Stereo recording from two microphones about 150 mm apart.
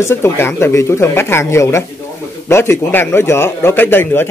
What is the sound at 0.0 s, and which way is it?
A man's voice, 15° left (ahead or behind).